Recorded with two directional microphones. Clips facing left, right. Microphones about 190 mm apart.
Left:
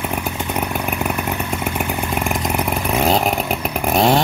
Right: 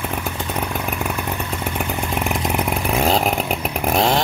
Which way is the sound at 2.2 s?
Centre (ahead or behind).